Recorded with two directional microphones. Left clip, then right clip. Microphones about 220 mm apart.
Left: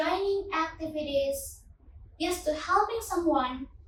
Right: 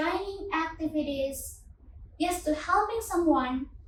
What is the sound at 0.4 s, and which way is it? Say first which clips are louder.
Child singing: even; 5° left (ahead or behind).